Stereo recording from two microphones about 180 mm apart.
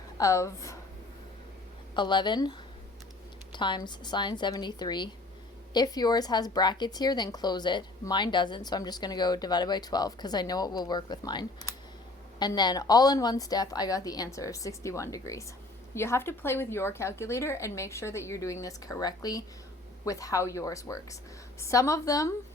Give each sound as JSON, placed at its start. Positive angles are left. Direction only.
{"t": 0.2, "sound": "a woman's voice", "side_deg": 15}
{"t": 2.0, "sound": "a woman's voice", "side_deg": 25}